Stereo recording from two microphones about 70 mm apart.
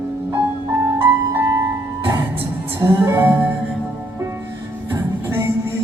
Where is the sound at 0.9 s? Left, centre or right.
Right.